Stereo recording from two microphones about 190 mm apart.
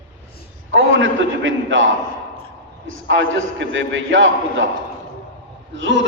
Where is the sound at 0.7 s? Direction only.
85° right.